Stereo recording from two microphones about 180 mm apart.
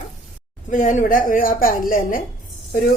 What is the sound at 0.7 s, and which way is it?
Speech, 45° left (ahead or behind).